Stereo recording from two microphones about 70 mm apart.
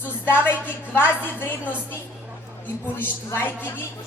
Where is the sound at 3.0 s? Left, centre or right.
Left.